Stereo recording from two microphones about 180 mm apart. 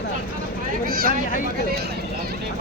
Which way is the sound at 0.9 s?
55° right (ahead or behind).